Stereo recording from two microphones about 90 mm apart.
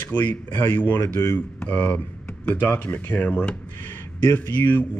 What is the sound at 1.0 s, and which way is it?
Speech, 30° left (ahead or behind).